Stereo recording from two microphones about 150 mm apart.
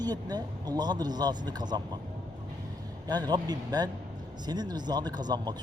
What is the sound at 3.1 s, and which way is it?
Speech, 25° right (ahead or behind).